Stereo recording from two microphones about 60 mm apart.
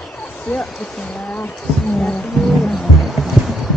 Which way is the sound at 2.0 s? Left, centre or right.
Centre.